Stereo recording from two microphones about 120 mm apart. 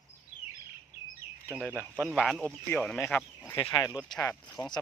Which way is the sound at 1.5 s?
15° right (ahead or behind).